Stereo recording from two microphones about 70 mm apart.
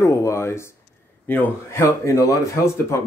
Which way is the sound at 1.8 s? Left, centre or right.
Left.